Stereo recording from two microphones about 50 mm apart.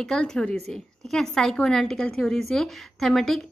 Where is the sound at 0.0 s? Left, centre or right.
Centre.